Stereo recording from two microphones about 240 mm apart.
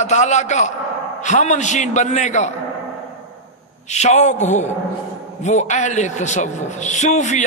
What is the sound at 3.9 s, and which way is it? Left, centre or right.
A man's voice, left.